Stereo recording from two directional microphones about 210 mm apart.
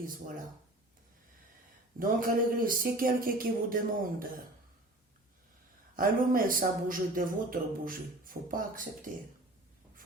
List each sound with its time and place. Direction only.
0.0 s speech: 40° right (ahead or behind)
2.0 s speech: 40° right (ahead or behind)
6.0 s speech: 40° right (ahead or behind)